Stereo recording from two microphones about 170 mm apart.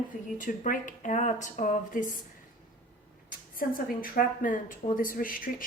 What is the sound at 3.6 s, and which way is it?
Speech, 55° left (ahead or behind).